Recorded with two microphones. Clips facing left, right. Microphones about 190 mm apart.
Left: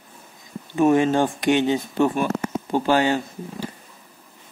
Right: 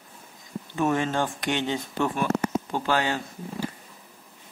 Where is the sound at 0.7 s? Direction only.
15° left (ahead or behind).